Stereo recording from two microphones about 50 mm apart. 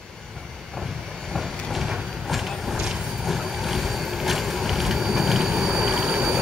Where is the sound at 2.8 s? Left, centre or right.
Centre.